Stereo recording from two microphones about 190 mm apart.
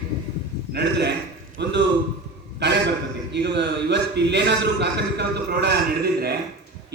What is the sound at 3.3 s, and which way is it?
A man's voice, 65° right (ahead or behind).